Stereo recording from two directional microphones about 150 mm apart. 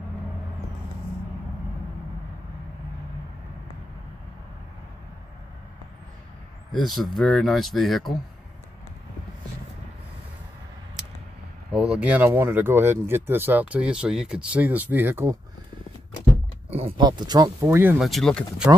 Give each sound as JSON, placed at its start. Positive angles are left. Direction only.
{"t": 6.7, "sound": "speech", "side_deg": 0}
{"t": 11.7, "sound": "speech", "side_deg": -5}
{"t": 16.9, "sound": "speech", "side_deg": -30}
{"t": 17.6, "sound": "speech", "side_deg": -15}
{"t": 18.0, "sound": "speech", "side_deg": 0}